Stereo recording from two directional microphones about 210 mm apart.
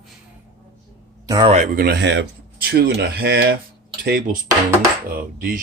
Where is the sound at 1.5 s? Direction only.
35° right (ahead or behind).